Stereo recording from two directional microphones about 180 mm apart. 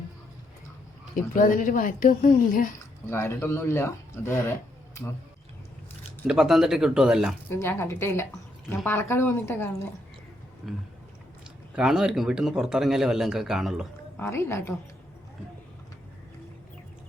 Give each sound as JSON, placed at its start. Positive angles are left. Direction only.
{"t": 1.3, "sound": "a woman's voice", "side_deg": 50}
{"t": 3.1, "sound": "speech", "side_deg": 15}
{"t": 6.2, "sound": "speech", "side_deg": -5}
{"t": 7.5, "sound": "speech", "side_deg": 15}
{"t": 11.8, "sound": "speech", "side_deg": -5}
{"t": 14.2, "sound": "speech", "side_deg": 15}